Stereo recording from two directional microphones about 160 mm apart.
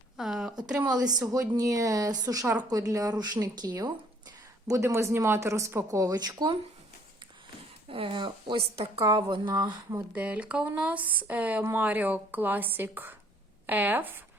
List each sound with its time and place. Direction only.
0.2 s speech: centre (ahead or behind)
0.8 s speech: 25° right (ahead or behind)
7.9 s speech: 35° right (ahead or behind)
10.1 s speech: 10° right (ahead or behind)